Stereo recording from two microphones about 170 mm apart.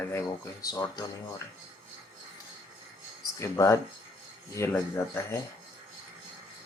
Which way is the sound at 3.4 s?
15° left (ahead or behind).